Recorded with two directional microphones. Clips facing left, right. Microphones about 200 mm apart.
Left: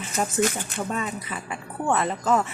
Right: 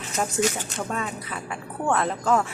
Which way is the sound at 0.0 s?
Centre (ahead or behind).